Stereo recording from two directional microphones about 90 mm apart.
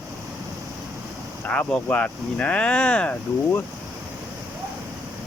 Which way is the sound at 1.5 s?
15° left (ahead or behind).